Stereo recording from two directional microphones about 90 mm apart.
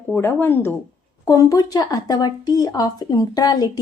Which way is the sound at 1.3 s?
45° left (ahead or behind).